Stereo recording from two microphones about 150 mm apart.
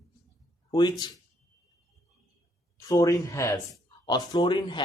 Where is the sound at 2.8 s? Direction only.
20° left (ahead or behind).